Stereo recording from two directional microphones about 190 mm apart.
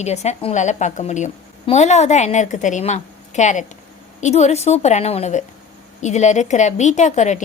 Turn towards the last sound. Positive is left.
turn(degrees=40)  # may be behind; listen again after turning